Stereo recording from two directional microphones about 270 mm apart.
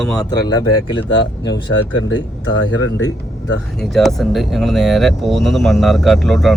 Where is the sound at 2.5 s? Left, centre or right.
Left.